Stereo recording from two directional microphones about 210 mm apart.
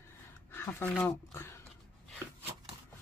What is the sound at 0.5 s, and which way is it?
Speech, 10° left (ahead or behind).